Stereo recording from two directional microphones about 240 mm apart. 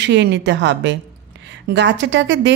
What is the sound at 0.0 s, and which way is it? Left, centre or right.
A woman's voice, right.